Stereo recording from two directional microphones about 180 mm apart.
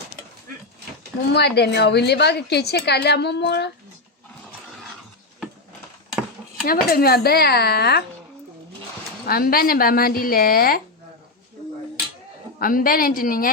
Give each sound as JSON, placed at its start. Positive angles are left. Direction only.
{"t": 1.3, "sound": "a woman's voice", "side_deg": 65}
{"t": 6.1, "sound": "a sound", "side_deg": -5}
{"t": 6.7, "sound": "speech", "side_deg": 55}
{"t": 9.2, "sound": "speech", "side_deg": 55}
{"t": 12.5, "sound": "a woman's voice", "side_deg": 50}